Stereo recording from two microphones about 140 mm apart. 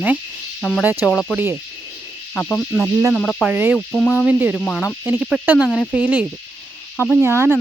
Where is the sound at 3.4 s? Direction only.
10° right (ahead or behind).